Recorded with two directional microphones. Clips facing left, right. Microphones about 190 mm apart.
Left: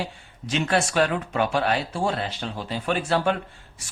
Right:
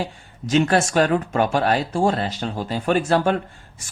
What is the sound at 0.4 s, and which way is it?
Speech, 45° right (ahead or behind).